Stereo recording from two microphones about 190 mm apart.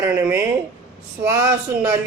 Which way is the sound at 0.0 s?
10° right (ahead or behind).